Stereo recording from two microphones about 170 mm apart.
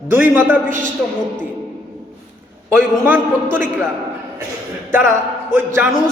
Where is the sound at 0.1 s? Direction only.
10° right (ahead or behind).